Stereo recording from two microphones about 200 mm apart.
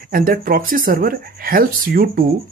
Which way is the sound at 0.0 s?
45° right (ahead or behind).